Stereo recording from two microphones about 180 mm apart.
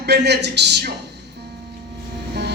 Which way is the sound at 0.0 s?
70° right (ahead or behind).